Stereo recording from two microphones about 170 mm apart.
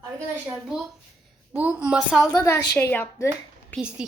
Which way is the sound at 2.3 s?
20° left (ahead or behind).